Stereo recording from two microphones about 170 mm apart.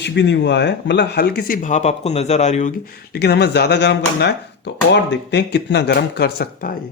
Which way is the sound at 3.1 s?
70° left (ahead or behind).